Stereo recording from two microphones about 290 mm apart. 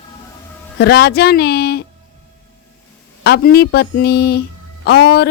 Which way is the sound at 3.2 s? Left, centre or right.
Left.